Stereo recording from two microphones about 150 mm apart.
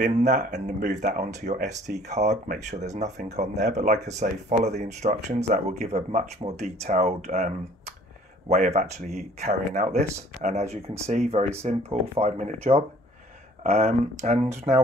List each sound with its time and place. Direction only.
0.0 s speech: 55° right (ahead or behind)